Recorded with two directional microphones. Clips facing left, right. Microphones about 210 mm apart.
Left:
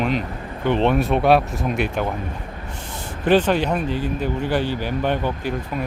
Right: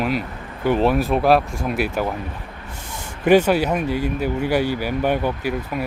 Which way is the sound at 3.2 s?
10° right (ahead or behind).